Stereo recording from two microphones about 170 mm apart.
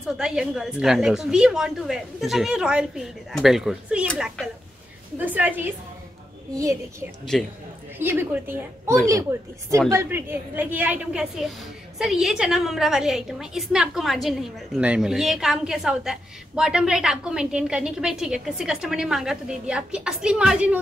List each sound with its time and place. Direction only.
0.2 s a woman's voice: 5° right (ahead or behind)
5.2 s a woman's voice: 10° right (ahead or behind)
7.3 s a woman's voice: 5° left (ahead or behind)
8.0 s a woman's voice: 10° right (ahead or behind)